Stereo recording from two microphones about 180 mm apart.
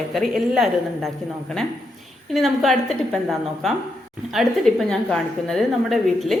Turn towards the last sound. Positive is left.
turn(degrees=0)  # may be behind; listen again after turning